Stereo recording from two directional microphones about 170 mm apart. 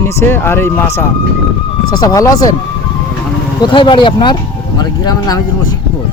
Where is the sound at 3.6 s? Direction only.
25° left (ahead or behind).